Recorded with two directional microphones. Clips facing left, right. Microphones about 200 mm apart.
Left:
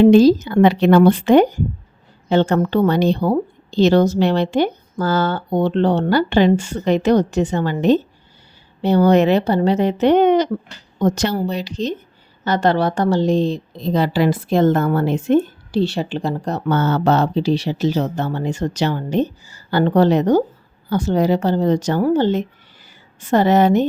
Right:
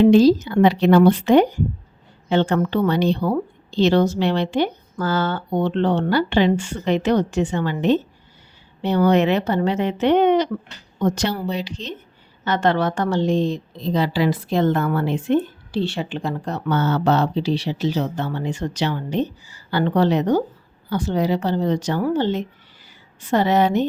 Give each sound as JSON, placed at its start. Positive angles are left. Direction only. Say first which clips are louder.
{"t": 0.0, "sound": "a woman's voice", "louder": "left 3 dB", "side_deg": 50}
{"t": 13.8, "sound": "a woman's voice", "louder": "left 3 dB", "side_deg": 50}